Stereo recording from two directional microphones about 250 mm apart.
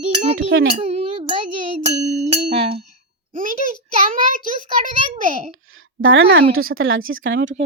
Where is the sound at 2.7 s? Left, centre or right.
Right.